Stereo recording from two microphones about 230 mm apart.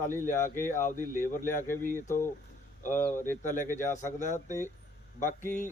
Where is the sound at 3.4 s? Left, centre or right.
Left.